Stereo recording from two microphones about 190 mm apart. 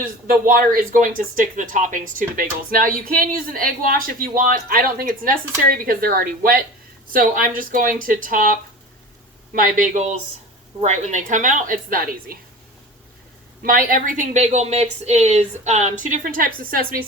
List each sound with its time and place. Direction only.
0.0 s a woman's voice: 50° right (ahead or behind)
13.6 s a woman's voice: 50° right (ahead or behind)